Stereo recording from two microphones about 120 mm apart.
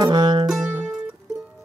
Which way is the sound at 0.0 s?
35° right (ahead or behind).